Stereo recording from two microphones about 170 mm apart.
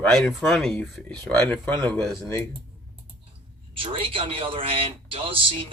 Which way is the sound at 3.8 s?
30° right (ahead or behind).